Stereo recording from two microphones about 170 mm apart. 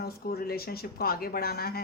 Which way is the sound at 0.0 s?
65° left (ahead or behind).